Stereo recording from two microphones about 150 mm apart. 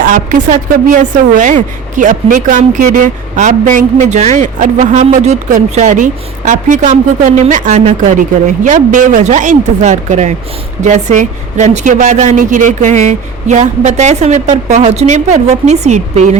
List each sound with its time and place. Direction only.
0.0 s a woman's voice: 60° right (ahead or behind)